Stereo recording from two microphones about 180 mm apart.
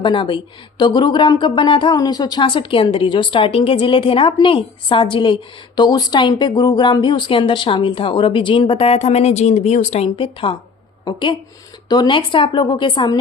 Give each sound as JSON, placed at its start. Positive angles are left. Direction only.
{"t": 0.0, "sound": "a woman's voice", "side_deg": 25}